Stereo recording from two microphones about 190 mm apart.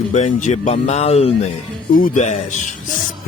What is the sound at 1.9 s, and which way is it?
Speech, 45° left (ahead or behind).